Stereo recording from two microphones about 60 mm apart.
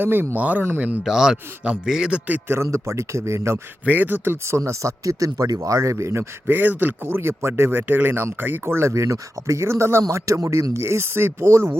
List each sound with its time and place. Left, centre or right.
0.0 s a man's voice: right
1.0 s a man's voice: centre
1.6 s a man's voice: centre
2.6 s speech: right
3.8 s speech: right
6.5 s speech: right